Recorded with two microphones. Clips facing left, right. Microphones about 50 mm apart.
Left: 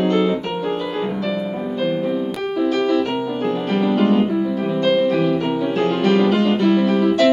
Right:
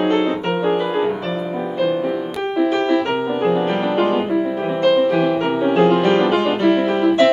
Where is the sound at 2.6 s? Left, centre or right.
Right.